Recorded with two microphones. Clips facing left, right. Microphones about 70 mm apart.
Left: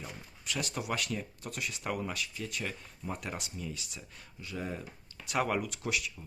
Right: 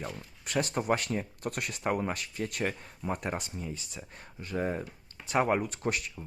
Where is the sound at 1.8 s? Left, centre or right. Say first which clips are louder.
Right 6 dB; right.